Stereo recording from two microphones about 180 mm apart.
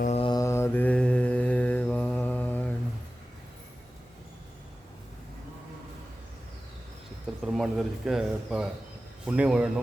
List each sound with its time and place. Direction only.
0.0 s mantra: 35° left (ahead or behind)
0.3 s mantra: 15° left (ahead or behind)
7.4 s a man's voice: centre (ahead or behind)